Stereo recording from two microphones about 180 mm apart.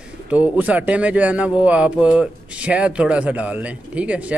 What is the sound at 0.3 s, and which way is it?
A man's voice, 10° right (ahead or behind).